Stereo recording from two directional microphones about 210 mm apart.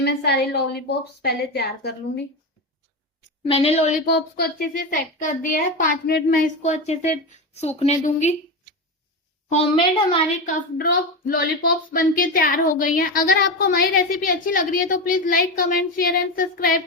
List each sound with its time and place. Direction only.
0.0 s a woman's voice: 50° left (ahead or behind)
3.5 s a woman's voice: 30° left (ahead or behind)
9.5 s a child's voice: 30° left (ahead or behind)
11.3 s a woman's voice: 40° left (ahead or behind)